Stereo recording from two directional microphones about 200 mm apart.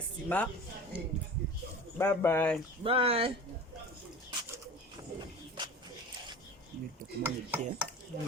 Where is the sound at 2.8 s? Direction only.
30° right (ahead or behind).